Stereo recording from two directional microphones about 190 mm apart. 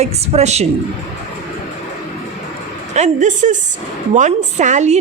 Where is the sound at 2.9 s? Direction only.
40° right (ahead or behind).